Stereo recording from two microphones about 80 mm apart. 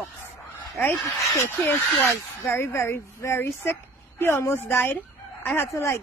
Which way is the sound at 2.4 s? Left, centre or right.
Left.